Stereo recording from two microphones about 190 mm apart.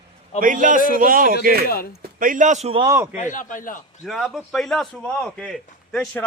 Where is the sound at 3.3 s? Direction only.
45° left (ahead or behind).